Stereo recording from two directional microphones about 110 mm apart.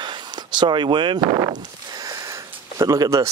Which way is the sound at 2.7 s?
30° right (ahead or behind).